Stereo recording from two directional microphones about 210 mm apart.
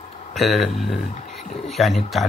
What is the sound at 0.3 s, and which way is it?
Speech, centre (ahead or behind).